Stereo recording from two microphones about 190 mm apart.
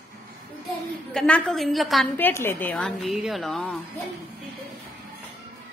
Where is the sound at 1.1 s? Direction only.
5° left (ahead or behind).